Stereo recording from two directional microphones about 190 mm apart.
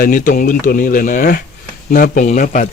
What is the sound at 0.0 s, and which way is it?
Speech, 45° left (ahead or behind).